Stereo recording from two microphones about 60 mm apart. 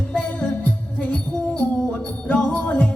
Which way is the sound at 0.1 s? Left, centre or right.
Centre.